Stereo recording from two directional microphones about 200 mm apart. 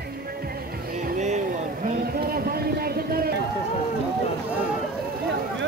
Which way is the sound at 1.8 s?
50° right (ahead or behind).